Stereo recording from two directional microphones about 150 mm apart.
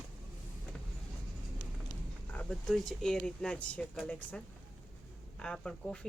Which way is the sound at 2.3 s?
5° left (ahead or behind).